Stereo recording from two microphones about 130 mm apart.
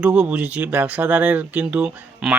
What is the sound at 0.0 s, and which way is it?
Speech, 10° right (ahead or behind).